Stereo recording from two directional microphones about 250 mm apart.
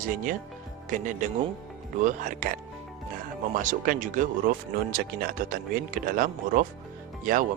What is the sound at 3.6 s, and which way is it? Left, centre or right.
Speech, right.